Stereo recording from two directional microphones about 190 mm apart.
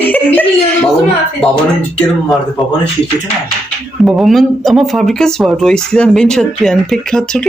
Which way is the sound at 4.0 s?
Centre (ahead or behind).